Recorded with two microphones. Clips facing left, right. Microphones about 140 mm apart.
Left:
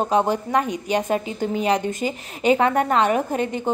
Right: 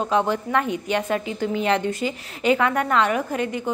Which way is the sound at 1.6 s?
15° left (ahead or behind).